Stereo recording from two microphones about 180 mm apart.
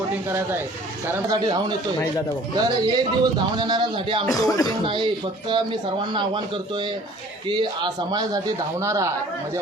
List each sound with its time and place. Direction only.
0.3 s a man's voice: 15° right (ahead or behind)
4.3 s speech: 20° left (ahead or behind)
5.5 s a man's voice: 25° right (ahead or behind)